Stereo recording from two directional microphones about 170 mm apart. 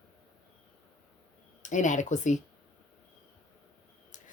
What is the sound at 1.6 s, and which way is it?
Speech, 45° left (ahead or behind).